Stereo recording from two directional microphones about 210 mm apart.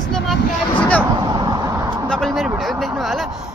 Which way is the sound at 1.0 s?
20° right (ahead or behind).